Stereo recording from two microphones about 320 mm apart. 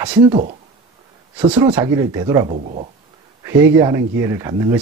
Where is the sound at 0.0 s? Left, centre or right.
Centre.